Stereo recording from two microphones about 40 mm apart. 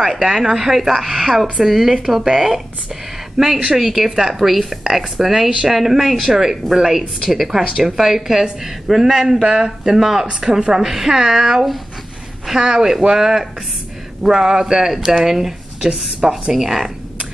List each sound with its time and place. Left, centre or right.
0.0 s a woman's voice: centre
9.4 s a woman's voice: centre
9.7 s a woman's voice: centre